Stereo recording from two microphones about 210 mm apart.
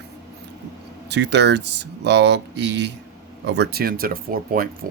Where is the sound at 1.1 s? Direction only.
55° right (ahead or behind).